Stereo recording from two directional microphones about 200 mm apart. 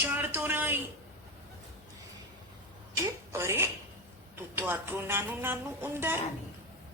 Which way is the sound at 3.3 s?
15° right (ahead or behind).